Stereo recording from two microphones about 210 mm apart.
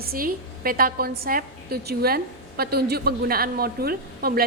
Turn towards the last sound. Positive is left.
turn(degrees=-45)  # may be behind; listen again after turning